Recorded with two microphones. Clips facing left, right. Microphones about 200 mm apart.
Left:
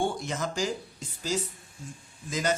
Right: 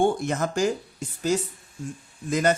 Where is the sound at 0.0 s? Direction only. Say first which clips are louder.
Right 7 dB; 55° right (ahead or behind).